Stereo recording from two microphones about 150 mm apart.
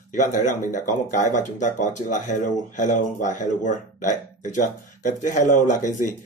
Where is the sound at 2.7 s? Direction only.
55° left (ahead or behind).